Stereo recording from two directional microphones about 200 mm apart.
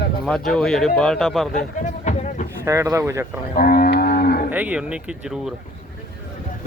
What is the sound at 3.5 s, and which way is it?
Livestock, 45° left (ahead or behind).